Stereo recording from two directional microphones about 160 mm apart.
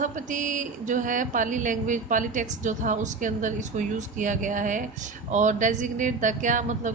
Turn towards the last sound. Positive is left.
turn(degrees=-55)  # may be behind; listen again after turning